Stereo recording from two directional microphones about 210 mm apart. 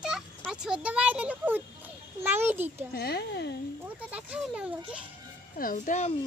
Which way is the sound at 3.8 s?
5° right (ahead or behind).